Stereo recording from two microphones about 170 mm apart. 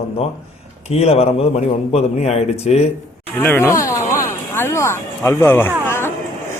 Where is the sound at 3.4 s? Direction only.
15° left (ahead or behind).